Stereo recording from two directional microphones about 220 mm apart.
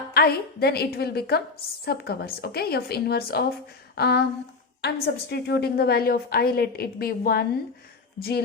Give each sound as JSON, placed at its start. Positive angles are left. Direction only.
{"t": 0.1, "sound": "a woman's voice", "side_deg": 45}